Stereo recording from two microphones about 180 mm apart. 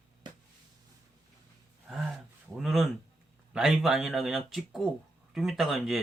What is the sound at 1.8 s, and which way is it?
Speech, 5° right (ahead or behind).